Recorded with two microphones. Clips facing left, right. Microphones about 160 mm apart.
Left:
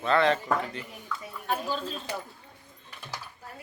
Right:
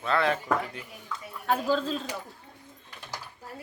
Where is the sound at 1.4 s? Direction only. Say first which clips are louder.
Right 5 dB; 90° right.